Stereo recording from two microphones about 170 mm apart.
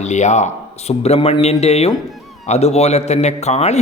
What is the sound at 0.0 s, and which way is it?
A man's voice, 45° left (ahead or behind).